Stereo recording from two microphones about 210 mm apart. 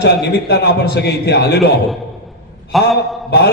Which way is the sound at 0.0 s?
55° left (ahead or behind).